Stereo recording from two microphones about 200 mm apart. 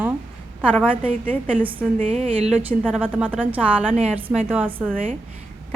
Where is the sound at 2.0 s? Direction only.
35° right (ahead or behind).